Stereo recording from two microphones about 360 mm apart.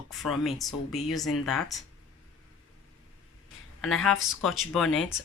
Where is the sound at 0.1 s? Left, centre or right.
Centre.